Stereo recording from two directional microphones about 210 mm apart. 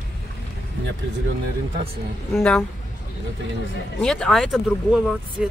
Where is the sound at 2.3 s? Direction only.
Centre (ahead or behind).